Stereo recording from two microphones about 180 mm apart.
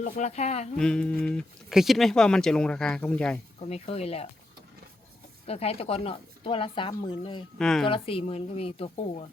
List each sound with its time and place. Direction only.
0.0 s speech: 40° left (ahead or behind)
0.8 s speech: 5° left (ahead or behind)
3.6 s speech: 35° left (ahead or behind)
5.5 s speech: 35° left (ahead or behind)
7.6 s speech: 5° left (ahead or behind)
7.9 s speech: 30° left (ahead or behind)